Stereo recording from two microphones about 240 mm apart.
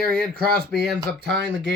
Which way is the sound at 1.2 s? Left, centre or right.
Right.